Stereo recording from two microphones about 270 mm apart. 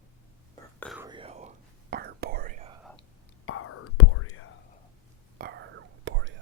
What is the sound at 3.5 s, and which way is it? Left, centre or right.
Whispering, left.